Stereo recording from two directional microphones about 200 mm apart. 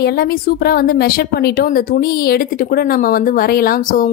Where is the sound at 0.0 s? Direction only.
50° left (ahead or behind).